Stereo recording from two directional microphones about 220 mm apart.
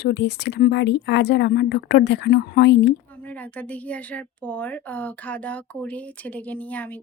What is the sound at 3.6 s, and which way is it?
Speech, 5° left (ahead or behind).